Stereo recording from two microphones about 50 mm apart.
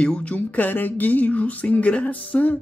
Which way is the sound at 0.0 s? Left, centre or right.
Left.